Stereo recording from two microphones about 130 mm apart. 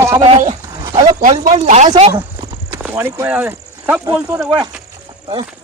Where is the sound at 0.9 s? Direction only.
60° right (ahead or behind).